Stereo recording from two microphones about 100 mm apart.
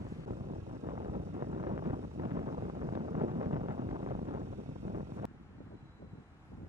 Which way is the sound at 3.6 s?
90° right.